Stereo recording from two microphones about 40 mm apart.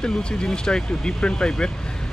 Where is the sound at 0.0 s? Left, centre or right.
Left.